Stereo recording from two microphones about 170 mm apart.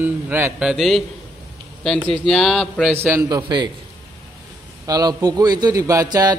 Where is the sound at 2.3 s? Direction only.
Centre (ahead or behind).